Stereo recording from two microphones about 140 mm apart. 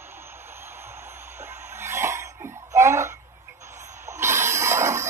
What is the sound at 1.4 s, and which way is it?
Cough, 15° right (ahead or behind).